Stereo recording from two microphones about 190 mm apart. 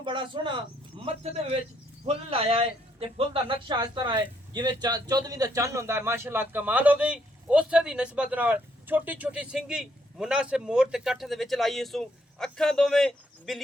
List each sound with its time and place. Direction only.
0.0 s a man's voice: 25° right (ahead or behind); by 13.6 s centre (ahead or behind)